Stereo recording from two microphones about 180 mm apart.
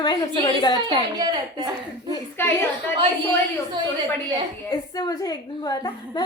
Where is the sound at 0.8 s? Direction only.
25° right (ahead or behind).